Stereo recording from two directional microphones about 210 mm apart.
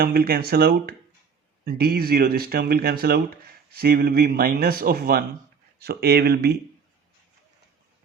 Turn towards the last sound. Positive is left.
turn(degrees=-50)  # may be behind; listen again after turning